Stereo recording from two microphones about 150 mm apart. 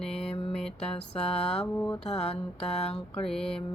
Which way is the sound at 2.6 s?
40° left (ahead or behind).